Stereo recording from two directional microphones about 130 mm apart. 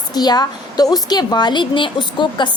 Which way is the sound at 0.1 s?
30° left (ahead or behind).